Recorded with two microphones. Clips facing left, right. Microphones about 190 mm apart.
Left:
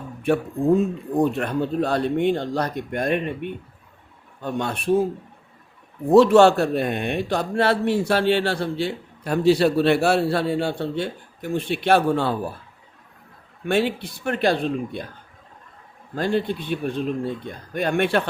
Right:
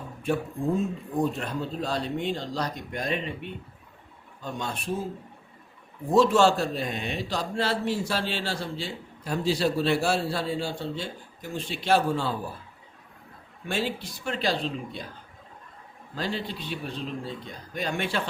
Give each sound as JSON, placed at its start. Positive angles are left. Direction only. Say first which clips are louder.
{"t": 1.2, "sound": "a man's voice", "louder": "left 7 dB", "side_deg": 65}
{"t": 6.1, "sound": "a man's voice", "louder": "left 7 dB", "side_deg": 65}
{"t": 13.7, "sound": "a man's voice", "louder": "left 8 dB", "side_deg": 60}
{"t": 16.1, "sound": "a man's voice", "louder": "left 9 dB", "side_deg": 55}